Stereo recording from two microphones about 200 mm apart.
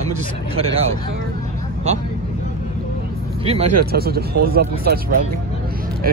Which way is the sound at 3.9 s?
50° right (ahead or behind).